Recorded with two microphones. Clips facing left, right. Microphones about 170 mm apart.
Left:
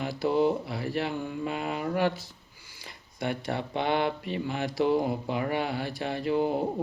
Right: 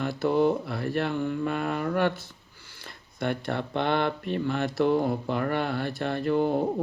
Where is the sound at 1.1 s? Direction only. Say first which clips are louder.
Right 5 dB; 10° left (ahead or behind).